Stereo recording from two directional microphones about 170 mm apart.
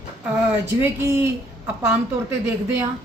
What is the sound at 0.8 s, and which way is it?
Speech, 15° right (ahead or behind).